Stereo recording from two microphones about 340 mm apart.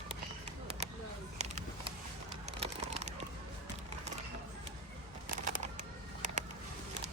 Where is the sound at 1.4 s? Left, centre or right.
Centre.